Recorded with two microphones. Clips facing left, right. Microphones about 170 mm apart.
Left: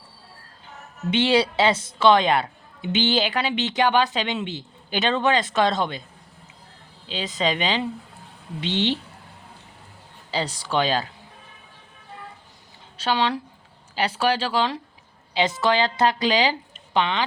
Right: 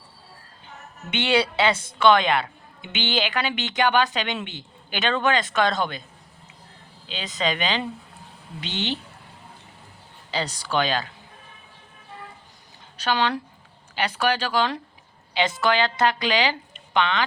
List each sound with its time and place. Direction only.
1.1 s a woman's voice: 35° left (ahead or behind)
7.1 s a woman's voice: 30° left (ahead or behind)
10.3 s speech: 25° left (ahead or behind)
13.0 s a woman's voice: 30° left (ahead or behind)